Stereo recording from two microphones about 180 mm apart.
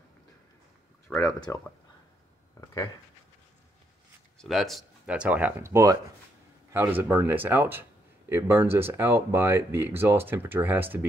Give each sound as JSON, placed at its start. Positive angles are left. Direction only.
{"t": 1.0, "sound": "speech", "side_deg": 15}
{"t": 2.6, "sound": "speech", "side_deg": 20}
{"t": 4.4, "sound": "speech", "side_deg": 0}